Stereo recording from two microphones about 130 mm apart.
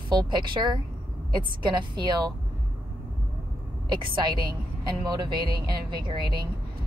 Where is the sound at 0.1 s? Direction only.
35° right (ahead or behind).